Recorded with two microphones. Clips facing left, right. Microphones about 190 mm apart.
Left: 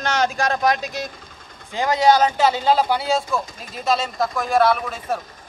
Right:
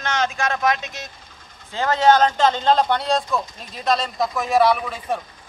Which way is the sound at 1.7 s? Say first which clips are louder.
Even; 15° left (ahead or behind).